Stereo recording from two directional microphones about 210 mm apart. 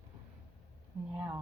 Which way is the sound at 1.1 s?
5° right (ahead or behind).